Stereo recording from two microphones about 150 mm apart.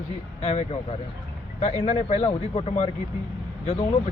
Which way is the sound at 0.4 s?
50° left (ahead or behind).